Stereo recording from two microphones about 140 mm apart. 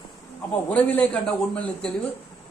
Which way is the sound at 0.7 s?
10° left (ahead or behind).